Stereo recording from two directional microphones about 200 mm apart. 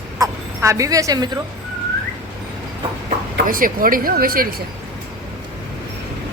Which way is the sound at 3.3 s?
45° right (ahead or behind).